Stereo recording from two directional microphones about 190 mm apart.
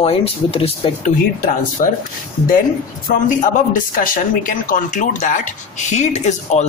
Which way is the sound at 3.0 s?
45° left (ahead or behind).